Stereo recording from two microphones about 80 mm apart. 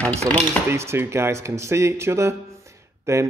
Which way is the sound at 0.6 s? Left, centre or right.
Right.